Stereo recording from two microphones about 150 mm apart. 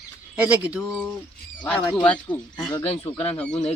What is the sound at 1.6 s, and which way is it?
Speech, 10° left (ahead or behind).